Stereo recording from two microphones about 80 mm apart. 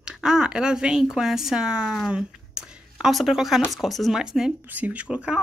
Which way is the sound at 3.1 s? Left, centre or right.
Centre.